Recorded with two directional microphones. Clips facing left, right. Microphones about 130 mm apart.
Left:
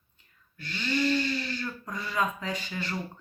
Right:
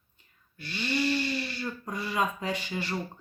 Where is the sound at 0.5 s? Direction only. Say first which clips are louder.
Even; 15° right (ahead or behind).